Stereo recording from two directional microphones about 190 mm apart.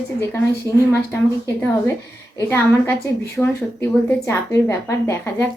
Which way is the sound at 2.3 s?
15° left (ahead or behind).